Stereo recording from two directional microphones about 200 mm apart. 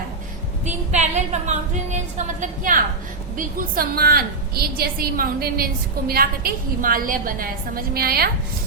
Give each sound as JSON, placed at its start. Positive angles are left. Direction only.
{"t": 0.9, "sound": "a woman's voice", "side_deg": -35}